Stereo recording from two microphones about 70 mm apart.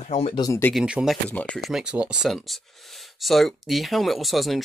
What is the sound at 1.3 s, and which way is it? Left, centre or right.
Speech, left.